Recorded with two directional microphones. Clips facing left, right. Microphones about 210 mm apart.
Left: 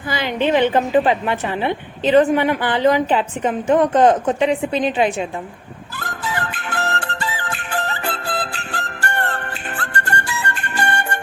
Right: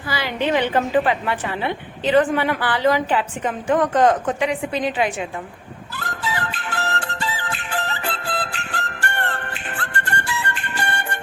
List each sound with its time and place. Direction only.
0.1 s a woman's voice: 25° left (ahead or behind)
6.0 s music: 50° left (ahead or behind)